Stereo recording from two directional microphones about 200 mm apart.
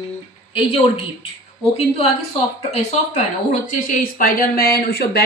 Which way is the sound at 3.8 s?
45° left (ahead or behind).